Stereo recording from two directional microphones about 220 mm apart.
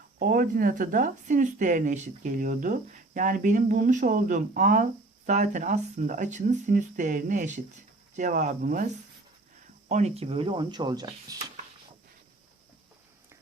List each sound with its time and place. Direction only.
0.2 s speech: 40° right (ahead or behind)
9.9 s speech: 30° right (ahead or behind)